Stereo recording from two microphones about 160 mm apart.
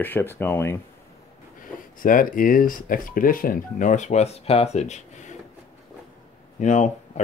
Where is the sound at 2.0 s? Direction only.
60° left (ahead or behind).